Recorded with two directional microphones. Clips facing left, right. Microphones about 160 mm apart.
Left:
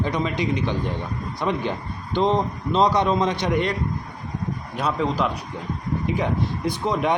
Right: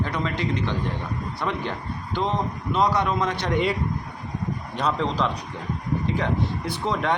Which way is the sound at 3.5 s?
5° right (ahead or behind).